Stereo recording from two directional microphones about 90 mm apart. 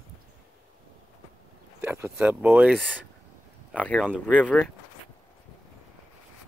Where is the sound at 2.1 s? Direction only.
15° right (ahead or behind).